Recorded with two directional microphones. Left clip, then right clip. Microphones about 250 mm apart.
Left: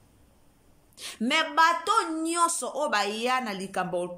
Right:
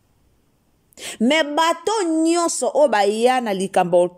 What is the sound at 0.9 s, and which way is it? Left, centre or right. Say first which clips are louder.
Speech: right 8 dB; right.